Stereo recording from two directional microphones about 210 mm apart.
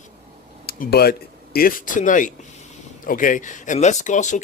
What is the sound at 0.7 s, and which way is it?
Speech, 50° left (ahead or behind).